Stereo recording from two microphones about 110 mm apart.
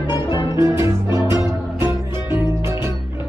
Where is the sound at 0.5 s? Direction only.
25° right (ahead or behind).